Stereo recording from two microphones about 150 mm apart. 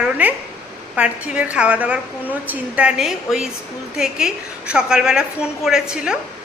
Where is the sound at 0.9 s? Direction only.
5° right (ahead or behind).